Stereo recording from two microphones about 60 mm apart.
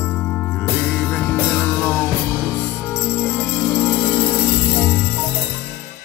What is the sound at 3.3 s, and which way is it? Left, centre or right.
Music, left.